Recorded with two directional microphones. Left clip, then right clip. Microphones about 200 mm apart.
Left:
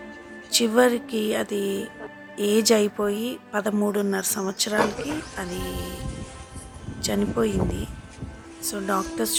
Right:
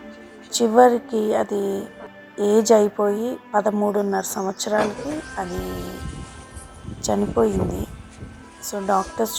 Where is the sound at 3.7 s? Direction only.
20° left (ahead or behind).